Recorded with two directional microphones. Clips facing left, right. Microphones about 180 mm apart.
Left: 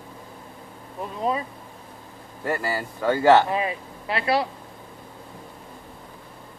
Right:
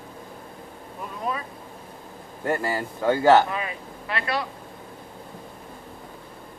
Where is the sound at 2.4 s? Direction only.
20° right (ahead or behind).